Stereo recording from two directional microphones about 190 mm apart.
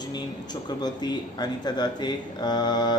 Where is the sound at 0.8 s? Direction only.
20° left (ahead or behind).